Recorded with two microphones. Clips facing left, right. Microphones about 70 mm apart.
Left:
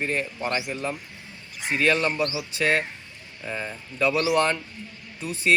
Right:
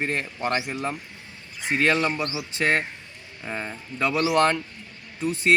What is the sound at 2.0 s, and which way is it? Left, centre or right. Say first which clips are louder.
Speech: left 1 dB; right.